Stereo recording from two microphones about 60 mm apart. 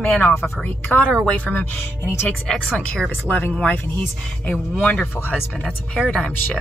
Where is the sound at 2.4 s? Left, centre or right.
Centre.